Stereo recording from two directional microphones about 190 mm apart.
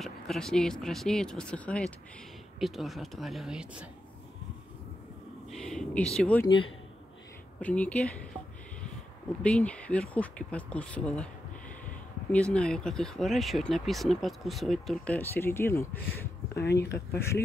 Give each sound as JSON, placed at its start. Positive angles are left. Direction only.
{"t": 0.0, "sound": "speech", "side_deg": 0}
{"t": 5.5, "sound": "a sound", "side_deg": 0}
{"t": 6.1, "sound": "speech", "side_deg": 5}
{"t": 7.6, "sound": "speech", "side_deg": 5}
{"t": 9.4, "sound": "speech", "side_deg": 5}
{"t": 12.3, "sound": "speech", "side_deg": 5}
{"t": 16.5, "sound": "speech", "side_deg": 60}